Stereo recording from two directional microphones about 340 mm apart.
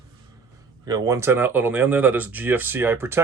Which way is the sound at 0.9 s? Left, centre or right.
Centre.